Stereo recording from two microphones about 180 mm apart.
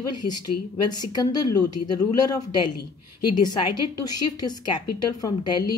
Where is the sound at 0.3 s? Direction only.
25° left (ahead or behind).